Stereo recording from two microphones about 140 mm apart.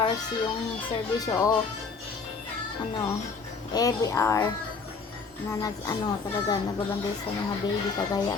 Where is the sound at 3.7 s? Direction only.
25° left (ahead or behind).